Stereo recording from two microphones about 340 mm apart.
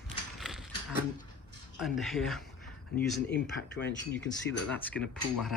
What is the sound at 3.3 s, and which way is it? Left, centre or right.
Speech, left.